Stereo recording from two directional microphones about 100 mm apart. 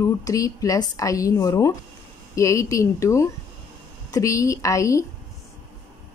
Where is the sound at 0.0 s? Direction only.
35° left (ahead or behind).